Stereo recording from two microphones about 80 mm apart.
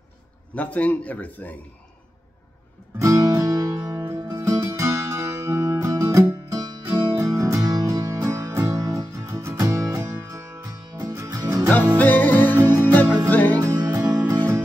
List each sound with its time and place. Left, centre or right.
0.6 s a man's voice: centre
3.0 s music: right
4.0 s music: right
4.3 s music: right
9.2 s music: right
12.0 s music: left
13.6 s music: right